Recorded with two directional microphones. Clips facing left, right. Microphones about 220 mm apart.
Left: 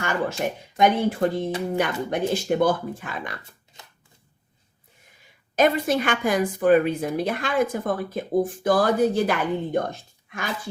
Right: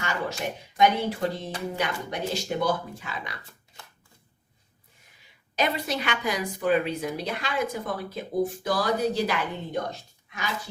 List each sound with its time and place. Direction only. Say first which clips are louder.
0.0 s a woman's voice: left 5 dB; 50° left (ahead or behind)
5.5 s a woman's voice: left 7 dB; 50° left (ahead or behind)